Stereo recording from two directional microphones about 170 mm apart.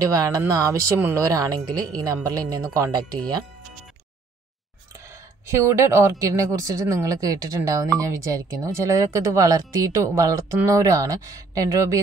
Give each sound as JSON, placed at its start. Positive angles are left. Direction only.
{"t": 0.0, "sound": "a woman's voice", "side_deg": -20}
{"t": 4.9, "sound": "a woman's voice", "side_deg": -15}